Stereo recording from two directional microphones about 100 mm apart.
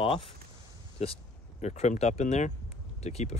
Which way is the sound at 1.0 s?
90° left.